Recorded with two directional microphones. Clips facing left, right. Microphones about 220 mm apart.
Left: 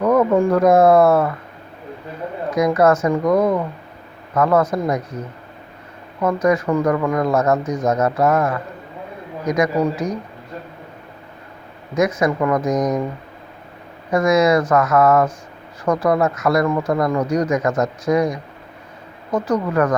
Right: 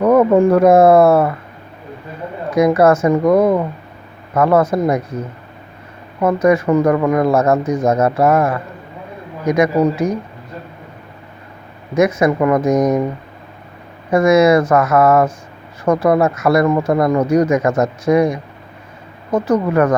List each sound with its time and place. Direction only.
0.0 s speech: 30° right (ahead or behind)
2.6 s speech: 30° right (ahead or behind)
6.1 s speech: 30° right (ahead or behind)
11.9 s a man's voice: 10° right (ahead or behind)
12.2 s speech: 25° right (ahead or behind)
14.1 s speech: 25° right (ahead or behind)